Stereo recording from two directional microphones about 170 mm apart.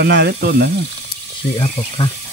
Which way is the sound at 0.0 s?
80° right.